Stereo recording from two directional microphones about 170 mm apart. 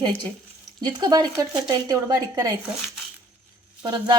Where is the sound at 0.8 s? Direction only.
25° right (ahead or behind).